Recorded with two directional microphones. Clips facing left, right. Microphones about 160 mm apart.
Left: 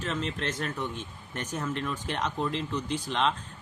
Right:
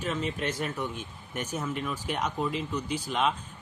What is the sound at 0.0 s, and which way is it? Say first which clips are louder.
Speech: right 1 dB; 10° right (ahead or behind).